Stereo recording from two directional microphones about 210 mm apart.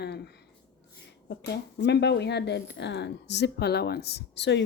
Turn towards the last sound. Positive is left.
turn(degrees=55)  # may be behind; listen again after turning